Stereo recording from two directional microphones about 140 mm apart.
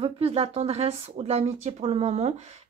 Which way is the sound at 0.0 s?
45° right (ahead or behind).